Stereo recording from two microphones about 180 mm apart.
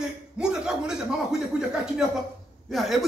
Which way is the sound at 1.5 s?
5° right (ahead or behind).